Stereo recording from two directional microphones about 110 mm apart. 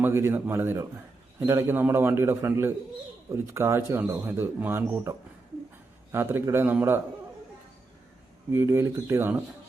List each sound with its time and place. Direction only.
0.0 s speech: 20° right (ahead or behind)
6.1 s speech: 20° right (ahead or behind)
8.5 s speech: 20° right (ahead or behind)